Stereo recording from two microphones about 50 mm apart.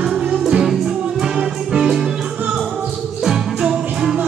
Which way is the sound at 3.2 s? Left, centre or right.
Centre.